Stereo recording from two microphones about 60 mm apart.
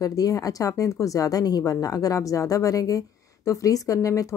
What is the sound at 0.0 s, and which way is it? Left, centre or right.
A woman's voice, left.